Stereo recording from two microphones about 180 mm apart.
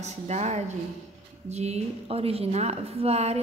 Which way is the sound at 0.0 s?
40° right (ahead or behind).